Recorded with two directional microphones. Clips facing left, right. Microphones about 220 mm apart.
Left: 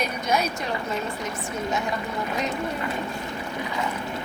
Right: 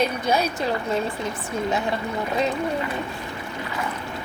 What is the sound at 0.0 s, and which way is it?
Speech, 30° right (ahead or behind).